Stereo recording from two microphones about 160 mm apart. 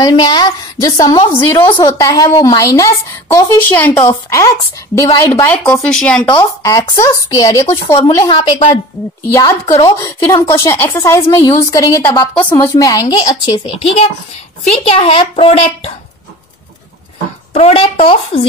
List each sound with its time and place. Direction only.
0.0 s a woman's voice: 30° left (ahead or behind)
5.9 s speech: 5° left (ahead or behind)
6.2 s a woman's voice: 20° left (ahead or behind)
9.3 s a woman's voice: 20° left (ahead or behind); by 15.5 s 35° left (ahead or behind)
17.6 s speech: 40° left (ahead or behind)